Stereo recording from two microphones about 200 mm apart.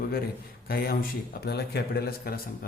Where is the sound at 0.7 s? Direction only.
50° left (ahead or behind).